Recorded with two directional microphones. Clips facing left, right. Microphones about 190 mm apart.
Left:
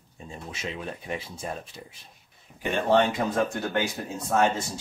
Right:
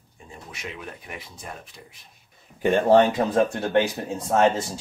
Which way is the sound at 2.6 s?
40° right (ahead or behind).